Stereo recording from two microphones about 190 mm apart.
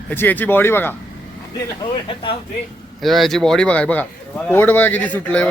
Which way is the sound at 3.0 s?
Centre (ahead or behind).